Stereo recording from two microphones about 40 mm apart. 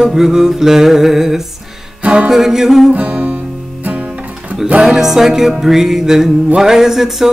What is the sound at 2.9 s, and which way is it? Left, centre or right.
Music, right.